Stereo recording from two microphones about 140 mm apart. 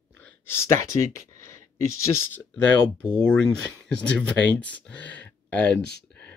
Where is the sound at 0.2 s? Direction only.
20° left (ahead or behind).